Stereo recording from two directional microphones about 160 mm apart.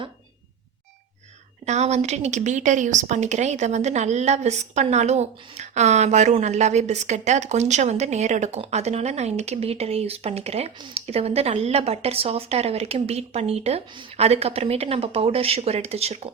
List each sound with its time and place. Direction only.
1.6 s speech: 45° right (ahead or behind)